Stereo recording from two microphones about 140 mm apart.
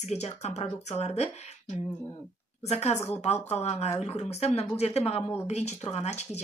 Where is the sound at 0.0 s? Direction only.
50° left (ahead or behind).